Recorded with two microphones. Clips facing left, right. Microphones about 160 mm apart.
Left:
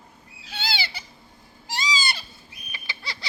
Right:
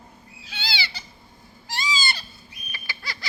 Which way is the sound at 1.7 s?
15° left (ahead or behind).